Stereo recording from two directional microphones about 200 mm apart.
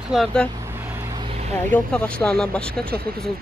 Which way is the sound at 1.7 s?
5° left (ahead or behind).